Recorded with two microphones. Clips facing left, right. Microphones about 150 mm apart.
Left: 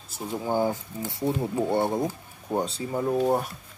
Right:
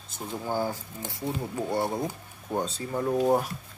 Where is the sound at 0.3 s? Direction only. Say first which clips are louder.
Left 4 dB; 15° left (ahead or behind).